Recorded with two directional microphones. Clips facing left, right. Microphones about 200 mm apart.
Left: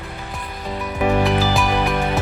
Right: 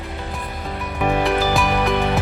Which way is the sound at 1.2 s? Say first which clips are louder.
Even; centre (ahead or behind).